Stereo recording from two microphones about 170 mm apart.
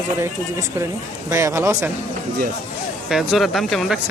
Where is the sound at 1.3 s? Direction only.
15° right (ahead or behind).